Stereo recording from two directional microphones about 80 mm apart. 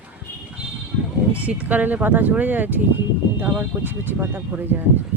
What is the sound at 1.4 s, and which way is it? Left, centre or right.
Speech, centre.